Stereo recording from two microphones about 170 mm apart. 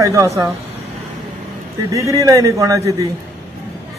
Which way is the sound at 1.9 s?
20° right (ahead or behind).